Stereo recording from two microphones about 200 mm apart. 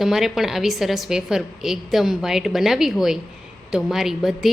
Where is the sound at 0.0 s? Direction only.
Centre (ahead or behind).